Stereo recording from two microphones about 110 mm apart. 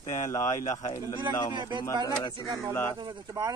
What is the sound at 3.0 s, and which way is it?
Speech, 40° right (ahead or behind).